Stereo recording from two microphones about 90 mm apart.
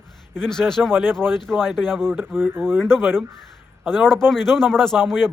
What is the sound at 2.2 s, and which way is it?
Speech, 25° right (ahead or behind).